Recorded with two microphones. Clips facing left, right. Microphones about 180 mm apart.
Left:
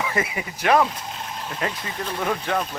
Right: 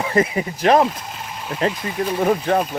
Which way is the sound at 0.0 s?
35° right (ahead or behind).